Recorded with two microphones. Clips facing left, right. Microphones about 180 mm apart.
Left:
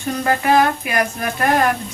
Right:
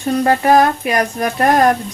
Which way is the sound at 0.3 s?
40° right (ahead or behind).